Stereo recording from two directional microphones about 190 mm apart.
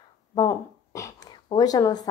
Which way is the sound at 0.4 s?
15° left (ahead or behind).